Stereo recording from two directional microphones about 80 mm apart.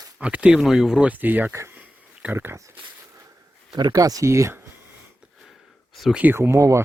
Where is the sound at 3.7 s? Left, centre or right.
Right.